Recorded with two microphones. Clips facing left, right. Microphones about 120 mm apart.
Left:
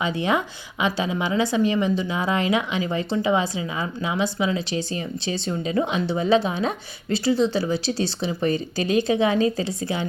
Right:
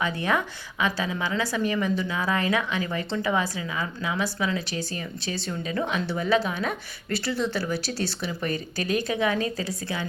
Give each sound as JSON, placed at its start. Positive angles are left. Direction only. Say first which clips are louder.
{"t": 0.0, "sound": "a woman's voice", "louder": "left 3 dB", "side_deg": 20}